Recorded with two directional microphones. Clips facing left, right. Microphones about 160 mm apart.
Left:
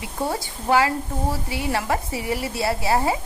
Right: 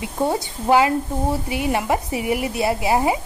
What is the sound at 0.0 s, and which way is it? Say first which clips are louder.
A woman's voice: right 5 dB; 20° right (ahead or behind).